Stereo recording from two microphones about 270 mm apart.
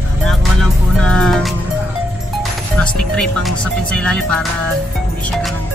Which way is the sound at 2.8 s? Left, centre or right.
Centre.